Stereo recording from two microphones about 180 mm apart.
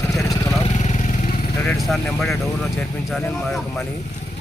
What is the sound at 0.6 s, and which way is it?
Vehicle, 40° left (ahead or behind).